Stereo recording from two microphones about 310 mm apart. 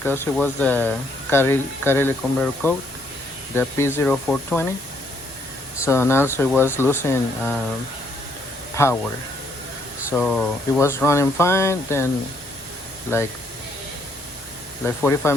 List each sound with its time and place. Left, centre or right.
0.0 s speech: centre
5.8 s speech: centre
8.7 s speech: centre
10.1 s speech: centre
13.1 s speech: centre
14.8 s speech: centre